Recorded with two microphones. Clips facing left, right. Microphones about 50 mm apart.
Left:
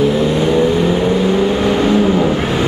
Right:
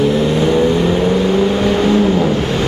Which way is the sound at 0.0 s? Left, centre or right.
Centre.